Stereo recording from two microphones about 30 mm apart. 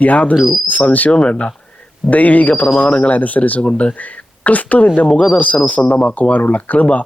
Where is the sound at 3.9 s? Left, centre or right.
Left.